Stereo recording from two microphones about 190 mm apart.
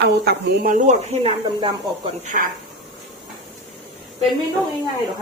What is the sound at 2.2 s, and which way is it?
Speech, 40° right (ahead or behind).